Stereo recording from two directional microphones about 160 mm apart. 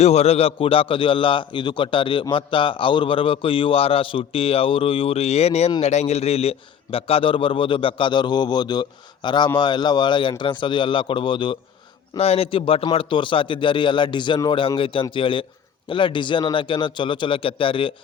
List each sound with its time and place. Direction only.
0.0 s a man's voice: 40° left (ahead or behind)